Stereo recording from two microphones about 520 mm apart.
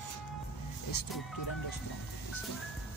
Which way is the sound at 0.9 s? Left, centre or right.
Left.